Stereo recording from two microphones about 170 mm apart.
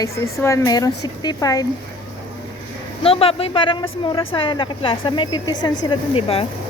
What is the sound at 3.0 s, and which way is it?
Speech, 35° left (ahead or behind).